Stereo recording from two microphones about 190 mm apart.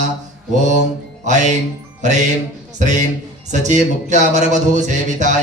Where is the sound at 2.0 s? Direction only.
40° right (ahead or behind).